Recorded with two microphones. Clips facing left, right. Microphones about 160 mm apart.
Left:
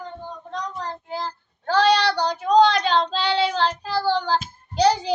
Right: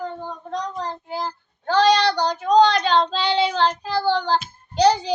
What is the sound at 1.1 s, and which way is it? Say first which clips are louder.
Child singing: right 2 dB; 5° right (ahead or behind).